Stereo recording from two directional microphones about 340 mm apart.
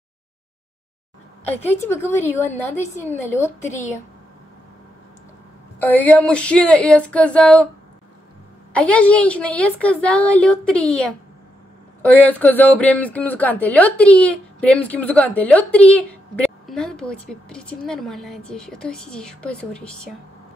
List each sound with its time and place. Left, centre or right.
1.4 s a woman's voice: centre
3.6 s speech: left
5.8 s speech: centre
8.7 s speech: centre